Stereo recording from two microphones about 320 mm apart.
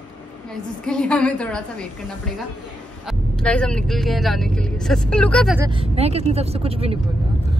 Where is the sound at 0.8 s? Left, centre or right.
Centre.